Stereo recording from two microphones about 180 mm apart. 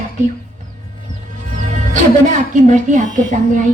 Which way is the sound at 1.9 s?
45° right (ahead or behind).